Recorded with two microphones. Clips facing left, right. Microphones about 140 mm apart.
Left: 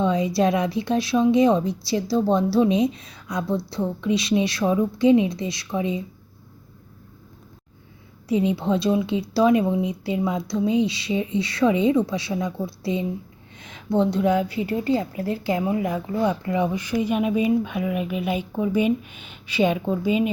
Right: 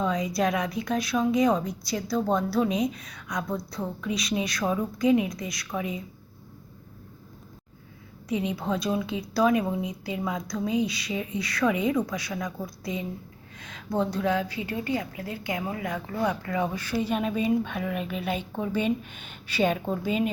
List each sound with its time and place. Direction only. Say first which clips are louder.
0.0 s a woman's voice: left 5 dB; 30° left (ahead or behind)
8.3 s a woman's voice: left 7 dB; 30° left (ahead or behind); by 20.2 s 5° left (ahead or behind)